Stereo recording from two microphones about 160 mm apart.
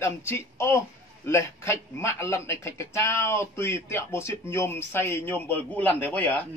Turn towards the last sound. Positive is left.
turn(degrees=10)  # may be behind; listen again after turning